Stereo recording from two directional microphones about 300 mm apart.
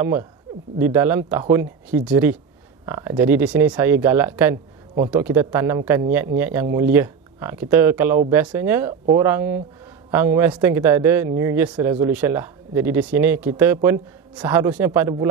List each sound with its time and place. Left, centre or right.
0.0 s speech: centre